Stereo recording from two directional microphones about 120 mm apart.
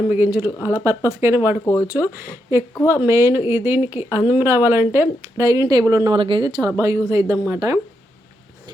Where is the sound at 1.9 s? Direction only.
20° right (ahead or behind).